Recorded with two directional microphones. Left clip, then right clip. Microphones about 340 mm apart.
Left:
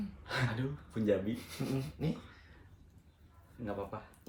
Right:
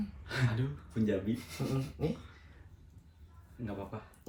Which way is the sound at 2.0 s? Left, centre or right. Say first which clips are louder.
Right 5 dB; centre.